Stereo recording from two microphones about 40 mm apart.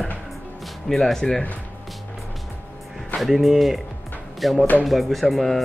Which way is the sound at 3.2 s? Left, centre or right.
Centre.